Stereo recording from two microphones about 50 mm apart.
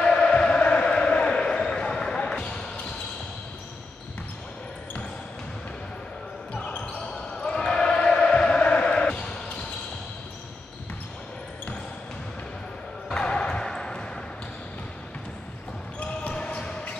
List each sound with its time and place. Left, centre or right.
0.0 s basketball bounce: centre
6.5 s basketball bounce: left
7.6 s a sound: centre
13.1 s basketball bounce: centre
16.0 s basketball bounce: left